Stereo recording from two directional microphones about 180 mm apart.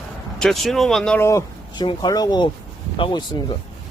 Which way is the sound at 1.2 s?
15° left (ahead or behind).